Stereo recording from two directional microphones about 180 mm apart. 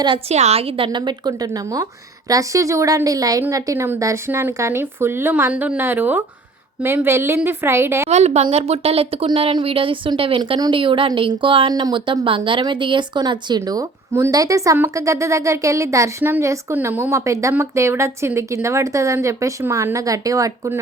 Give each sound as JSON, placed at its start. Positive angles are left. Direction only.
{"t": 0.0, "sound": "a woman's voice", "side_deg": -25}
{"t": 8.1, "sound": "speech", "side_deg": -40}